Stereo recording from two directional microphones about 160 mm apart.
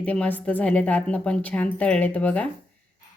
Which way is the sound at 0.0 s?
10° left (ahead or behind).